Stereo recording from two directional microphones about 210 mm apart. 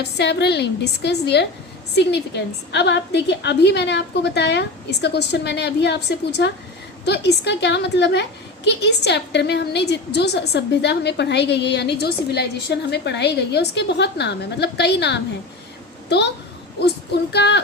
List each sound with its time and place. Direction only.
0.0 s a woman's voice: 55° left (ahead or behind)
17.3 s a woman's voice: 55° left (ahead or behind)